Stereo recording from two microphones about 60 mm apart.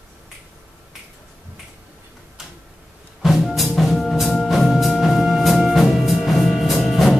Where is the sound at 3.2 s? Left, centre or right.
Centre.